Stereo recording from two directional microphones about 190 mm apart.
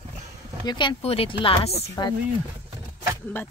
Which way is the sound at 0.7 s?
25° left (ahead or behind).